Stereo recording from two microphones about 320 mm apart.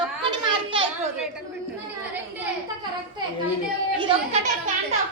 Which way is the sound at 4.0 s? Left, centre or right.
Centre.